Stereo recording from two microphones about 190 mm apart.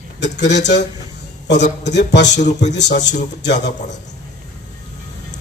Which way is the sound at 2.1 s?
65° left (ahead or behind).